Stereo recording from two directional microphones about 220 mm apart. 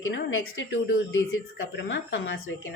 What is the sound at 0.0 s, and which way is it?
A woman's voice, 60° left (ahead or behind).